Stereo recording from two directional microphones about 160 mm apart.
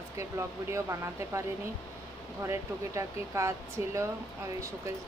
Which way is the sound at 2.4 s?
20° right (ahead or behind).